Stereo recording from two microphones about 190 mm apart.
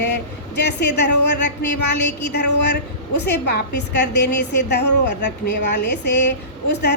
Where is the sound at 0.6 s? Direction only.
65° left (ahead or behind).